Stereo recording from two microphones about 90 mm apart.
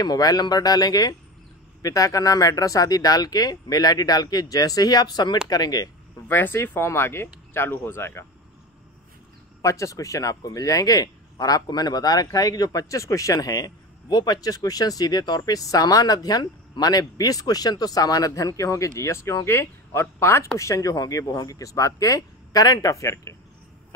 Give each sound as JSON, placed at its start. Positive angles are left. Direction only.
{"t": 0.0, "sound": "speech", "side_deg": 45}
{"t": 6.2, "sound": "speech", "side_deg": 25}
{"t": 9.6, "sound": "speech", "side_deg": 35}